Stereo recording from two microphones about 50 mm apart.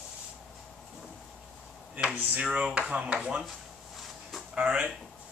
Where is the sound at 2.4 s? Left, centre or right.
Right.